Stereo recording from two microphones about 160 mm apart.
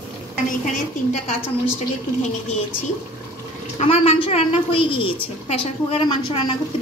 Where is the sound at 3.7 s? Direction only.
40° left (ahead or behind).